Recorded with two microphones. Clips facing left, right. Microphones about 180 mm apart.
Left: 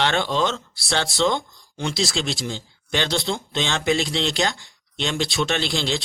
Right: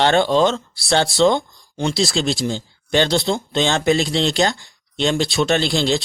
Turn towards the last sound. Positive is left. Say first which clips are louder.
# right 6 dB
turn(degrees=-40)  # may be behind; listen again after turning